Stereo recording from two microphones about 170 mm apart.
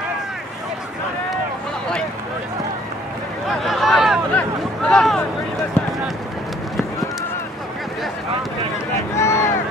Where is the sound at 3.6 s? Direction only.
Centre (ahead or behind).